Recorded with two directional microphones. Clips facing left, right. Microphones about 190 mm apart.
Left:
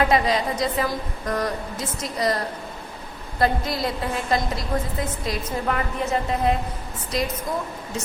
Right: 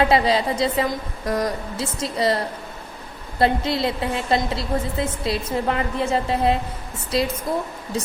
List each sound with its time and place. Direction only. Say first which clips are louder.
0.0 s a woman's voice: right 2 dB; 30° right (ahead or behind)